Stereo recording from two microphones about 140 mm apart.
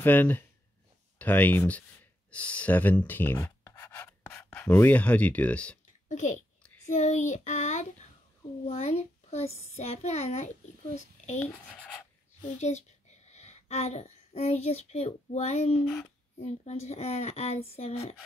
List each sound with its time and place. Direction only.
0.0 s speech: 15° left (ahead or behind)
6.0 s speech: 60° left (ahead or behind)
6.9 s child singing: 55° left (ahead or behind)
8.6 s a child's voice: 50° left (ahead or behind)
11.6 s speech: 5° left (ahead or behind)
12.5 s a child's voice: 55° left (ahead or behind)